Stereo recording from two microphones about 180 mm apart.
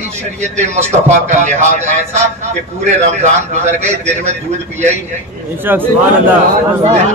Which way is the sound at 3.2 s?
40° right (ahead or behind).